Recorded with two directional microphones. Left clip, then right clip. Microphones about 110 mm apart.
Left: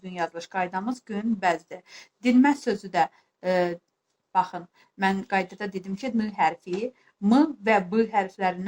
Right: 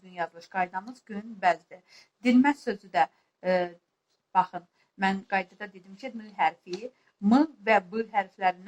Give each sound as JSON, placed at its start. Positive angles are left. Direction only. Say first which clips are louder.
{"t": 0.0, "sound": "speech", "louder": "left 4 dB", "side_deg": 35}